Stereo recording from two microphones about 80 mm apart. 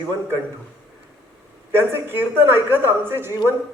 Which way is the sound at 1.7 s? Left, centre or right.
Right.